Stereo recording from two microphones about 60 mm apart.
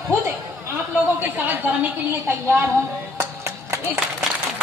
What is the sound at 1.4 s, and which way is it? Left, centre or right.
A woman's voice, right.